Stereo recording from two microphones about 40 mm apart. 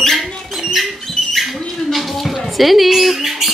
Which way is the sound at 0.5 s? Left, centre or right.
Centre.